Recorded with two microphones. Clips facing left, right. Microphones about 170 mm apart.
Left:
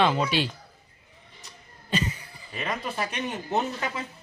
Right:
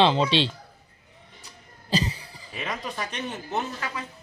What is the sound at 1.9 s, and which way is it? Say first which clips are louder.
Cough: right 2 dB; 35° right (ahead or behind).